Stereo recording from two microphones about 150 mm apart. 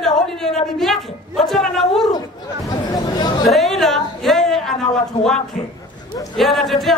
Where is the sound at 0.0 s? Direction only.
Centre (ahead or behind).